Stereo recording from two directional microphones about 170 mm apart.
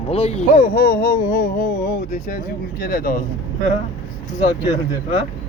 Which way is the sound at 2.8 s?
55° left (ahead or behind).